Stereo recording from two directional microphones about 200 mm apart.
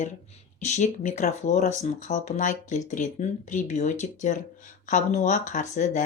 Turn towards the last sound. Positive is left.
turn(degrees=40)  # may be behind; listen again after turning